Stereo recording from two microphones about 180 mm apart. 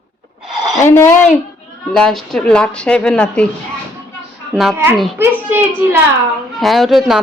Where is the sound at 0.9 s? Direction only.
15° left (ahead or behind).